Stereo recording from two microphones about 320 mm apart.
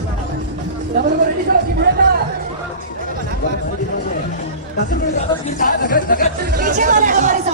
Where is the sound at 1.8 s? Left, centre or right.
Right.